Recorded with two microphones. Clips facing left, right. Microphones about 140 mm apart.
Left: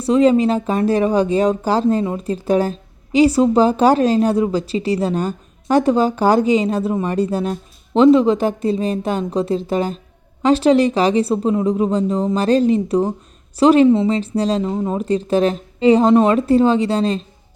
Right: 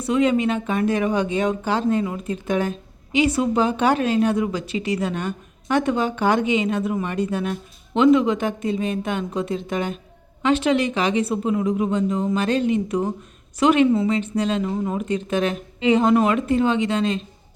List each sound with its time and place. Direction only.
0.0 s a woman's voice: 35° left (ahead or behind)